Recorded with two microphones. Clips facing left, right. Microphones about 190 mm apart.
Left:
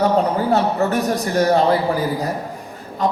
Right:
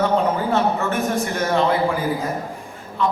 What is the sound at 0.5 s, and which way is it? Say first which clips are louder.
A man's voice: left 3 dB; 35° left (ahead or behind).